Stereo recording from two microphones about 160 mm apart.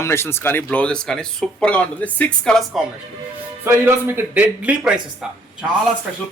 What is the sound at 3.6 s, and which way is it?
Speech, 15° right (ahead or behind).